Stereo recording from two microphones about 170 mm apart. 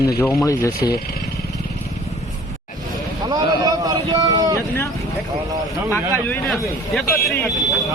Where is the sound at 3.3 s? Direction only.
20° right (ahead or behind).